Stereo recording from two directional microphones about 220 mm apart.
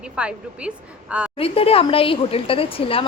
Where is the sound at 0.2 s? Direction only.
5° right (ahead or behind).